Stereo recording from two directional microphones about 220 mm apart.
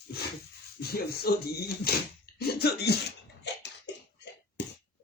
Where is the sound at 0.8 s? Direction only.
45° left (ahead or behind).